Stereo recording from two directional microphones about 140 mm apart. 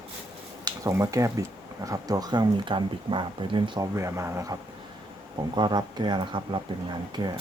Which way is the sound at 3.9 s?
20° right (ahead or behind).